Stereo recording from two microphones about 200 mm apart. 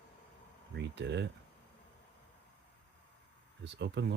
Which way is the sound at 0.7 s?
60° right (ahead or behind).